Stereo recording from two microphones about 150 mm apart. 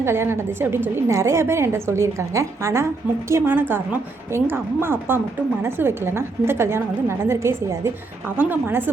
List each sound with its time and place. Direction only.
0.0 s a woman's voice: 15° right (ahead or behind)